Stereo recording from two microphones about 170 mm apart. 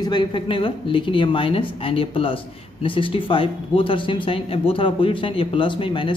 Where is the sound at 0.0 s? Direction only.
25° left (ahead or behind).